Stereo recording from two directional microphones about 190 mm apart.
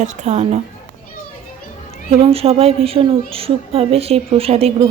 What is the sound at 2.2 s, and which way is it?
Speech, 30° right (ahead or behind).